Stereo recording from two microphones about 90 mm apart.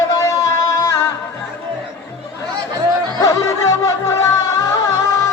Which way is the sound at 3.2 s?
35° left (ahead or behind).